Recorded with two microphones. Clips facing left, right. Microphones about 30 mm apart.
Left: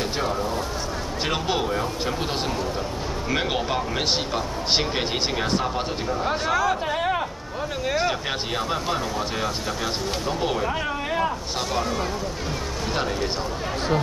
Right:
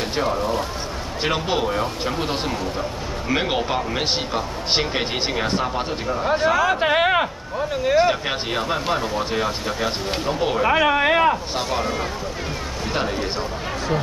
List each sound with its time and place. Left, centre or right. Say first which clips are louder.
1.2 s speech: right 3 dB; centre
3.3 s speech: right 3 dB; centre
6.8 s speech: right 6 dB; right
7.8 s speech: right 7 dB; centre
10.8 s speech: right 8 dB; right
11.5 s speech: right 2 dB; centre